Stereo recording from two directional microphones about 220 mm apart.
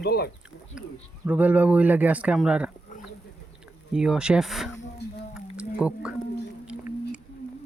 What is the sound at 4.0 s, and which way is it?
Speech, 5° right (ahead or behind).